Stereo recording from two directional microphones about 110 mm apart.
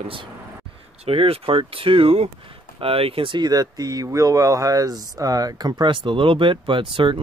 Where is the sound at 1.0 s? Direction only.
60° right (ahead or behind).